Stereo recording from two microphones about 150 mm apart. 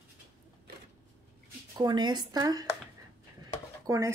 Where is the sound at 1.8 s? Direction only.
30° right (ahead or behind).